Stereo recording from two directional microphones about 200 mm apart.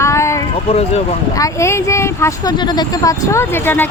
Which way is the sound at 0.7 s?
30° left (ahead or behind).